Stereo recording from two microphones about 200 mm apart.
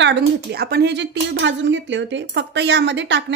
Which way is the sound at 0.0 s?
60° right (ahead or behind).